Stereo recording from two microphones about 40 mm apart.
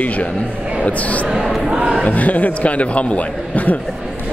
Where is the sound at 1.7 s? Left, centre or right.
Right.